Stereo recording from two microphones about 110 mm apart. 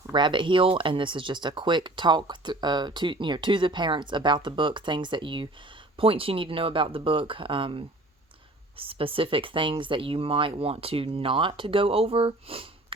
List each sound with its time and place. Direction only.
0.1 s speech: 45° right (ahead or behind)